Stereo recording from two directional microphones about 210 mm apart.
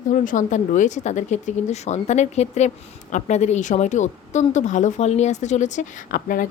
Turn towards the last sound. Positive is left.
turn(degrees=40)  # may be behind; listen again after turning